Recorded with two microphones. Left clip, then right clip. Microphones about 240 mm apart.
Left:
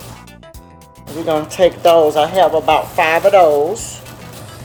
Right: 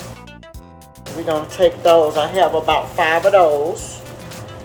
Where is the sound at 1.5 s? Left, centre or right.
Left.